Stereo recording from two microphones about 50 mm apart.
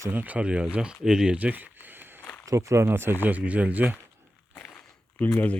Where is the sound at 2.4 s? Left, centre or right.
Right.